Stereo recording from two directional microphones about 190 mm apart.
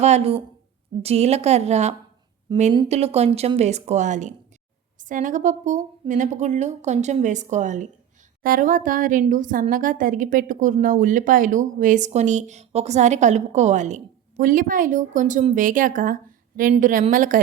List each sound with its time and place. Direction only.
0.0 s speech: 35° right (ahead or behind)